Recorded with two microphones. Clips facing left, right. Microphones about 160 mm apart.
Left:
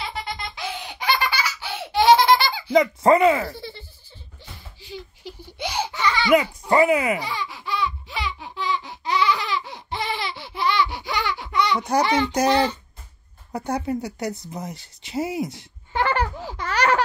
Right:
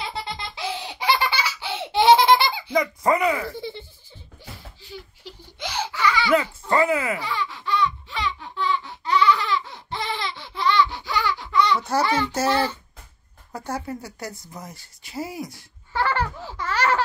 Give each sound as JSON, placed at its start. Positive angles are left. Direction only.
{"t": 0.1, "sound": "laughter", "side_deg": -30}
{"t": 2.7, "sound": "speech", "side_deg": 25}
{"t": 3.5, "sound": "music", "side_deg": -20}
{"t": 4.4, "sound": "a sound", "side_deg": -10}
{"t": 4.8, "sound": "baby laughter", "side_deg": 15}
{"t": 13.5, "sound": "speech", "side_deg": 20}
{"t": 14.5, "sound": "a sound", "side_deg": 20}